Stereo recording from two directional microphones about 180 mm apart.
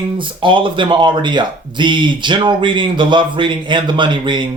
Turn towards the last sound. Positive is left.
turn(degrees=-25)  # may be behind; listen again after turning